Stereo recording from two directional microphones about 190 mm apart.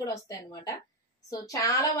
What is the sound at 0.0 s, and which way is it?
A woman's voice, 15° left (ahead or behind).